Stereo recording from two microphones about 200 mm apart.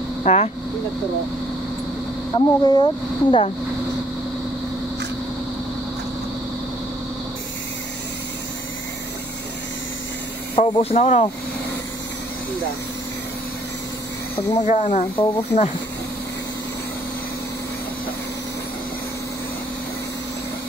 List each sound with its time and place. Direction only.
0.2 s speech: 30° left (ahead or behind)
2.3 s speech: 20° left (ahead or behind)
10.5 s speech: 30° left (ahead or behind)
14.7 s speech: 35° left (ahead or behind)